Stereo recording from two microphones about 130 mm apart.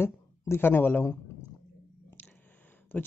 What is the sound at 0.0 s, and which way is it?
A woman's voice, 15° left (ahead or behind).